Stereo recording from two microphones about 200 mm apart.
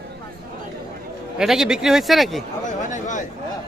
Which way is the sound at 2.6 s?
40° left (ahead or behind).